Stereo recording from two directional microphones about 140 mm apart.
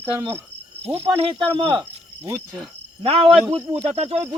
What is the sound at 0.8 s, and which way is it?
Speech, 45° right (ahead or behind).